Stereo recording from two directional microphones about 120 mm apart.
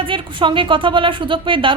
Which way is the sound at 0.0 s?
45° right (ahead or behind).